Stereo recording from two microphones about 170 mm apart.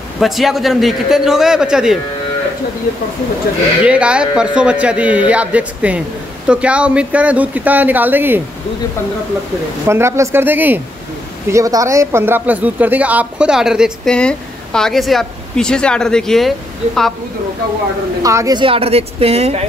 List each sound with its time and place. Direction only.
0.2 s speech: centre (ahead or behind)
3.8 s a man's voice: 5° right (ahead or behind)
9.8 s a man's voice: 15° right (ahead or behind); by 17.1 s centre (ahead or behind)
18.2 s a woman's voice: 20° right (ahead or behind); by 19.6 s 35° right (ahead or behind)